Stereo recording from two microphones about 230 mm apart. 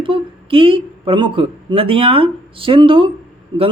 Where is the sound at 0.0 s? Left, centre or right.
Right.